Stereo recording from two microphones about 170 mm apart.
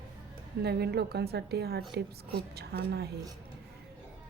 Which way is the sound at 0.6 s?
75° right (ahead or behind).